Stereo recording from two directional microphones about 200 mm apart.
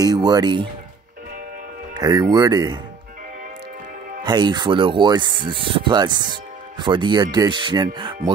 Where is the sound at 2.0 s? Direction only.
20° right (ahead or behind).